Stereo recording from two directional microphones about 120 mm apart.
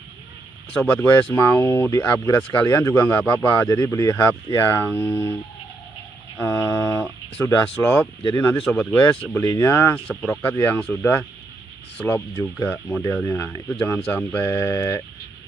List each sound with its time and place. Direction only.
0.7 s speech: 15° left (ahead or behind)
6.4 s a sound: 20° left (ahead or behind)
7.4 s speech: 20° left (ahead or behind)
9.4 s speech: 25° left (ahead or behind)
10.0 s speech: 5° left (ahead or behind)
10.5 s speech: 15° left (ahead or behind)
12.6 s speech: 10° left (ahead or behind); by 15.0 s 25° left (ahead or behind)